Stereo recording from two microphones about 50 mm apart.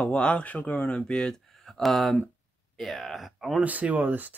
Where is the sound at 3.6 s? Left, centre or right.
Right.